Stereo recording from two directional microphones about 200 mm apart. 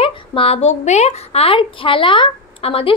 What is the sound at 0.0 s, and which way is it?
A woman's voice, 25° left (ahead or behind).